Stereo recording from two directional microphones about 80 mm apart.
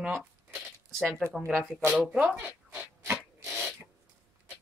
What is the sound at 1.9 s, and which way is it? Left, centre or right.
Rub, centre.